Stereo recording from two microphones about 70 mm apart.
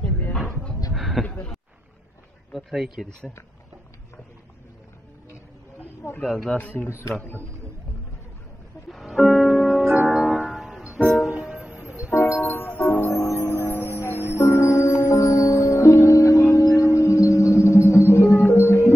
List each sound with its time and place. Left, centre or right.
0.9 s a sound: centre
1.2 s a sound: left
2.5 s speech: centre
6.2 s speech: centre
6.6 s speech: left
6.9 s speech: left
8.9 s music: centre
10.8 s music: centre
12.1 s music: left
13.8 s music: right
14.5 s music: left